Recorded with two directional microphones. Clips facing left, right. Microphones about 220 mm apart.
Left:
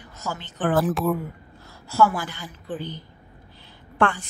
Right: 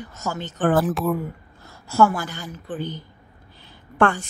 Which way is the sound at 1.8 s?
50° right (ahead or behind).